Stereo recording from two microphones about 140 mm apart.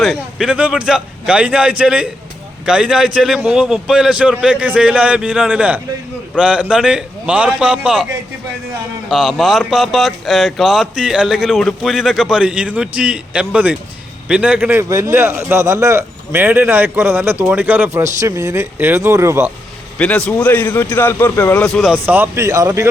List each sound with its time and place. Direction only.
0.0 s a man's voice: 5° right (ahead or behind)
9.0 s a man's voice: 5° right (ahead or behind); by 19.5 s 20° right (ahead or behind)
20.0 s a man's voice: 5° left (ahead or behind)
21.9 s speech: 15° right (ahead or behind)